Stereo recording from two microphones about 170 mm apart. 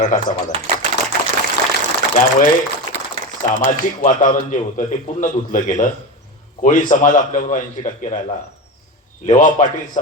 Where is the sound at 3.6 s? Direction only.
50° left (ahead or behind).